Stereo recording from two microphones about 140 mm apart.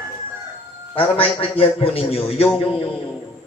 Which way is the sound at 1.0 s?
40° left (ahead or behind).